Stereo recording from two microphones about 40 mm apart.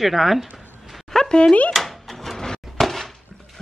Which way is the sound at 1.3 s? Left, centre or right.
Left.